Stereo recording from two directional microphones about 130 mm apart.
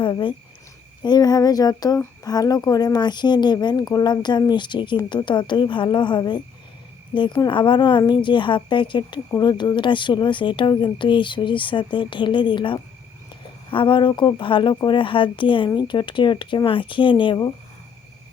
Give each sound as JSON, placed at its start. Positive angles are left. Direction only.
{"t": 0.0, "sound": "speech", "side_deg": 40}